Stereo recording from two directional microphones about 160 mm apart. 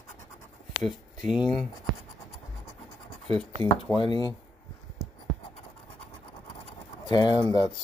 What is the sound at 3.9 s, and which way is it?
Speech, 5° left (ahead or behind).